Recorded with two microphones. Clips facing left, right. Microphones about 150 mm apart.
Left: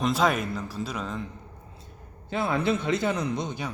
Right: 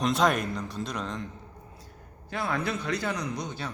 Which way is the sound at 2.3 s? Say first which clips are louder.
Left 5 dB; 25° left (ahead or behind).